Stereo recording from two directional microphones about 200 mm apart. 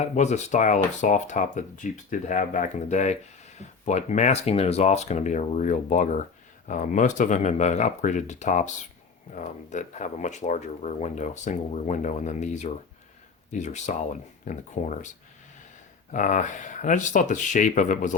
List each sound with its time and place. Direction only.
0.0 s speech: 35° left (ahead or behind)
16.1 s speech: 40° left (ahead or behind)